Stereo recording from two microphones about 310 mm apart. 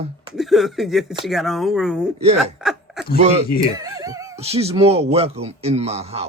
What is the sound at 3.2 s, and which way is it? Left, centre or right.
Speech, centre.